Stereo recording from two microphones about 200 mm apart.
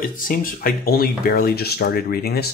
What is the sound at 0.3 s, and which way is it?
Speech, 45° left (ahead or behind).